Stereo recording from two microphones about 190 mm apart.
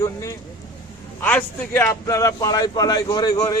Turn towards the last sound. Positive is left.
turn(degrees=20)  # may be behind; listen again after turning